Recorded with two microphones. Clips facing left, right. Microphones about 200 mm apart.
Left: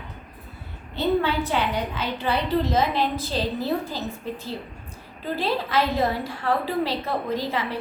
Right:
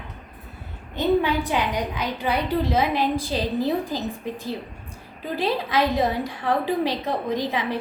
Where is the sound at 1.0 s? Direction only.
15° right (ahead or behind).